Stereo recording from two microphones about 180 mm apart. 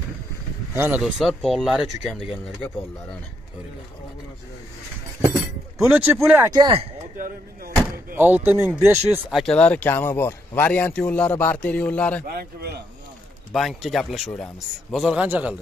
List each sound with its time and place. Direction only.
0.7 s a man's voice: 10° right (ahead or behind)
5.8 s speech: 15° right (ahead or behind)
6.5 s speech: 25° right (ahead or behind)
8.2 s speech: 10° right (ahead or behind)
9.3 s speech: 5° left (ahead or behind)
12.4 s speech: 65° right (ahead or behind)
13.5 s a man's voice: centre (ahead or behind)